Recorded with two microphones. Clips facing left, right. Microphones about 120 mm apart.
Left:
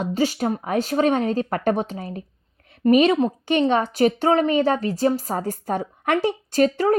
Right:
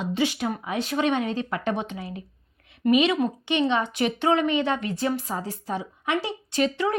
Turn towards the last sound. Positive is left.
turn(degrees=45)  # may be behind; listen again after turning